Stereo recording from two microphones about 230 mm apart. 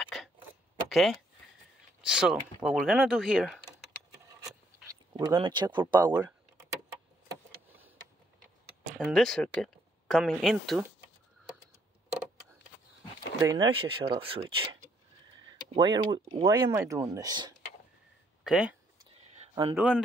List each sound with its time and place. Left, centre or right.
0.0 s a sound: centre
0.8 s speech: centre
5.1 s speech: centre
8.9 s speech: centre
13.4 s speech: centre
18.4 s speech: centre
19.5 s speech: centre